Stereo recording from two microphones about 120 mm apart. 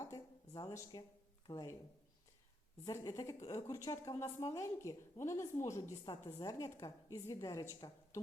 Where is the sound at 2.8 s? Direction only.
30° left (ahead or behind).